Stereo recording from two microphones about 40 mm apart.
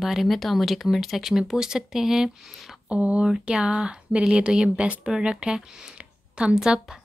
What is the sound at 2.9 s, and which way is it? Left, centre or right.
Speech, right.